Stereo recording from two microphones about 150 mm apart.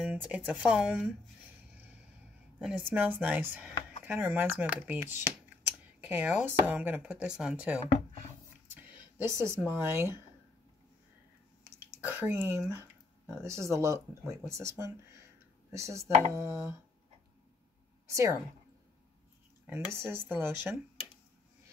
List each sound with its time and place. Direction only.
0.1 s a sound: 10° right (ahead or behind)
0.5 s speech: 5° right (ahead or behind)
2.6 s speech: 10° right (ahead or behind)
9.2 s speech: 20° right (ahead or behind)
12.1 s speech: 15° right (ahead or behind)
18.0 s a woman's voice: 20° right (ahead or behind)
19.6 s speech: 15° right (ahead or behind)